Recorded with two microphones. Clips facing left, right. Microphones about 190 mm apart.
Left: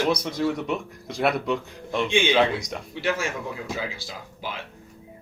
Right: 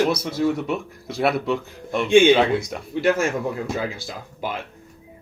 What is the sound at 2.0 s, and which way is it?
Speech, 50° right (ahead or behind).